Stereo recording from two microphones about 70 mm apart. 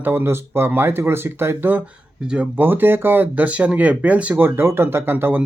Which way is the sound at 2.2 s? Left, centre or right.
Centre.